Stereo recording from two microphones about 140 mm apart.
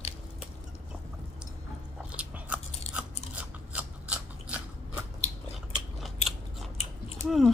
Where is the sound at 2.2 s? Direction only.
10° right (ahead or behind).